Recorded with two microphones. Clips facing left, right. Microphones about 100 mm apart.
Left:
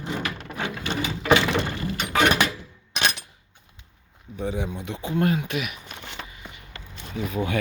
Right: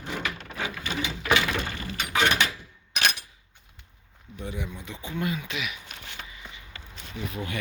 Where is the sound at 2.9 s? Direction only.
30° left (ahead or behind).